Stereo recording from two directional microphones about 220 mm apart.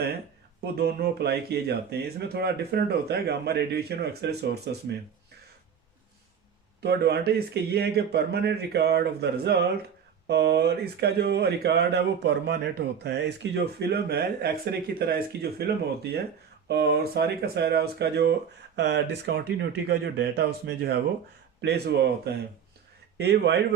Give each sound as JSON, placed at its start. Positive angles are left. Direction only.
{"t": 0.6, "sound": "speech", "side_deg": -45}
{"t": 6.8, "sound": "speech", "side_deg": -45}